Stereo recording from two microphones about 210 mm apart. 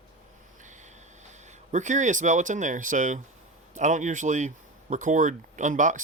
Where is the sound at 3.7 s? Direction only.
35° right (ahead or behind).